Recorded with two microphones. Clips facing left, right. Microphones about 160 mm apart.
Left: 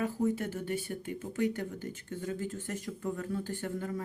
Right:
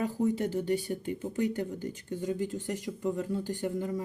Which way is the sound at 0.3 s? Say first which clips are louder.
Right 6 dB; 20° right (ahead or behind).